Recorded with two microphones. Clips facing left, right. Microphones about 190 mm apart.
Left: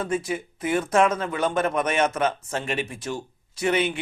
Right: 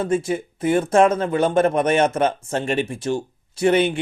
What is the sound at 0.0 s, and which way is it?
Speech, 30° right (ahead or behind).